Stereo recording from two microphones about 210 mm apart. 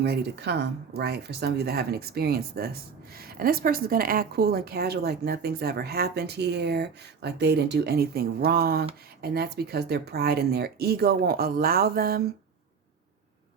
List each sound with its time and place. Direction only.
0.0 s speech: 50° right (ahead or behind)